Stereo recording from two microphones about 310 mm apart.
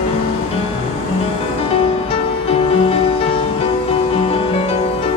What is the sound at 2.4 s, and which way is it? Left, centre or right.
Music, centre.